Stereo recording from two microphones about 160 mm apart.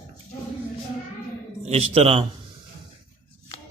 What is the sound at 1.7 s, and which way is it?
Speech, 40° right (ahead or behind).